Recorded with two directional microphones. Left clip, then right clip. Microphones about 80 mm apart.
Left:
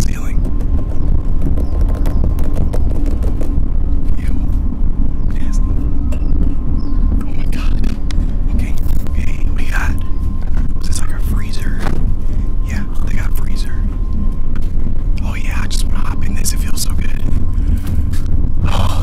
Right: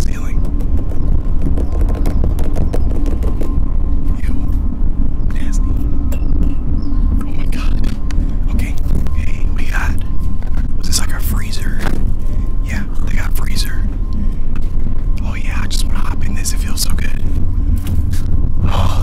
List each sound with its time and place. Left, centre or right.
2.4 s clip-clop: centre
7.2 s vehicle: centre
9.7 s whispering: centre
10.9 s whispering: right
16.3 s a sound: centre
18.6 s gasp: centre